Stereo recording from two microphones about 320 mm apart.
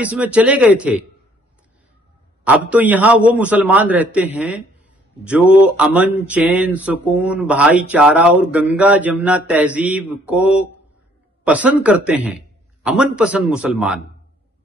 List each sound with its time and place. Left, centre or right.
0.0 s speech: centre
2.7 s speech: centre